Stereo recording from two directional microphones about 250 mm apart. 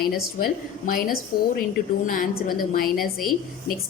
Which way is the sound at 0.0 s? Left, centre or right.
Left.